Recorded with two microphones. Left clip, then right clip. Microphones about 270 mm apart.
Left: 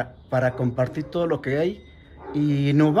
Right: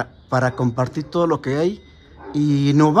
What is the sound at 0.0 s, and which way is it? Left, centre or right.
Speech, centre.